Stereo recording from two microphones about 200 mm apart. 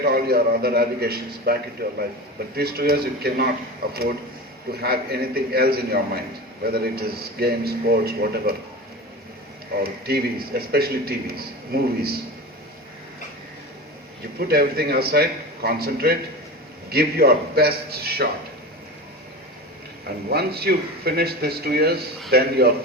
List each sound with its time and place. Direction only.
0.0 s a man's voice: 50° right (ahead or behind)
9.8 s a man's voice: 50° right (ahead or behind)
14.3 s a man's voice: 50° right (ahead or behind)
20.3 s a man's voice: 50° right (ahead or behind)